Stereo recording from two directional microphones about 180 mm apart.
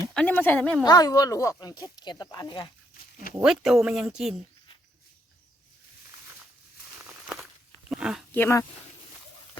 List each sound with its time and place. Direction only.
0.1 s speech: 5° left (ahead or behind)
0.9 s speech: 20° left (ahead or behind)
3.4 s speech: centre (ahead or behind)
7.1 s a sound: 5° right (ahead or behind)
7.9 s speech: 5° right (ahead or behind)
8.3 s speech: 15° left (ahead or behind)